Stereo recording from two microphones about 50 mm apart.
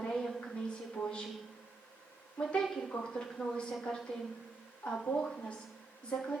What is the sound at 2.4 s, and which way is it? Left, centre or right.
Speech, left.